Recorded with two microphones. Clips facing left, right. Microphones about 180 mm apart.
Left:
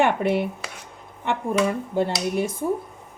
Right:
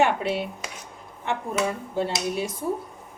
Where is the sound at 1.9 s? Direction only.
55° left (ahead or behind).